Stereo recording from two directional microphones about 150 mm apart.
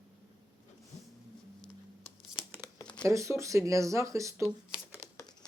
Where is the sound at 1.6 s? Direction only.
35° left (ahead or behind).